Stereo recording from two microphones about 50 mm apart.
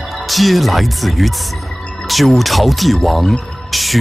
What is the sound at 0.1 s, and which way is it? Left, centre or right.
Speech, centre.